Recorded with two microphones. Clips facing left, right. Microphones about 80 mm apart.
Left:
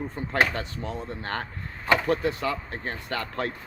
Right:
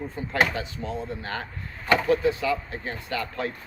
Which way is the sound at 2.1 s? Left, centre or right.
Left.